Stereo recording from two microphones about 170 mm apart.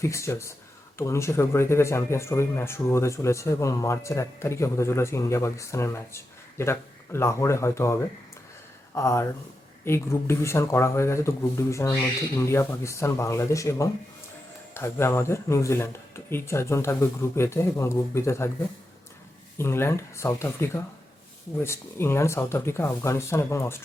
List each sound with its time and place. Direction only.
0.0 s speech: 15° left (ahead or behind)
9.0 s speech: 15° left (ahead or behind)
19.5 s speech: 15° left (ahead or behind)